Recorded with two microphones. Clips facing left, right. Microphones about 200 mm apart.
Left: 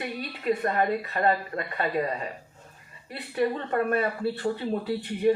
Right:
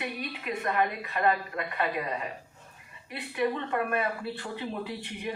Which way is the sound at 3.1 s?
40° left (ahead or behind).